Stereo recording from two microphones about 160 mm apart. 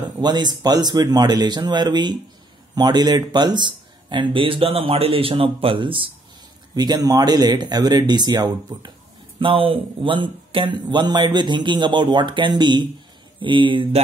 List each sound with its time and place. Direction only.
0.2 s speech: 25° right (ahead or behind)